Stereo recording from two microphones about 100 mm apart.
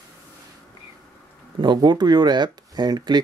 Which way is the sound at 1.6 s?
45° right (ahead or behind).